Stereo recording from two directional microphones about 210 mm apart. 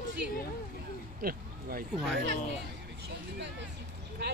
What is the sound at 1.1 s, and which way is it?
Speech, 45° right (ahead or behind).